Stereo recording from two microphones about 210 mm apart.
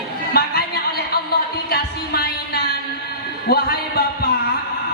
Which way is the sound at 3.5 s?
45° left (ahead or behind).